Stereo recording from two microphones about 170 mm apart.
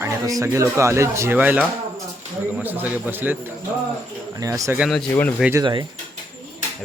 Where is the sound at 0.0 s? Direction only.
20° right (ahead or behind).